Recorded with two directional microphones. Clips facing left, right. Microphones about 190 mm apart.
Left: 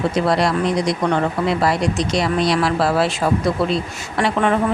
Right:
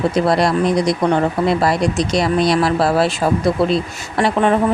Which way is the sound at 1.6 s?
40° right (ahead or behind).